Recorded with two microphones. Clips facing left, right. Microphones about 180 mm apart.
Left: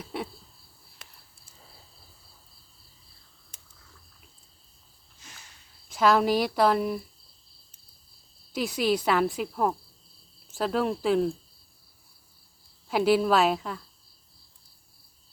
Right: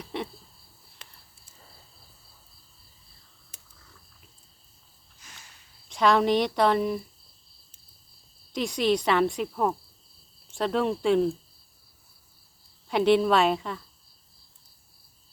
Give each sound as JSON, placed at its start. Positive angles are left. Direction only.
{"t": 0.0, "sound": "a sound", "side_deg": 5}
{"t": 5.9, "sound": "speech", "side_deg": 0}
{"t": 8.5, "sound": "speech", "side_deg": 5}
{"t": 12.9, "sound": "speech", "side_deg": 5}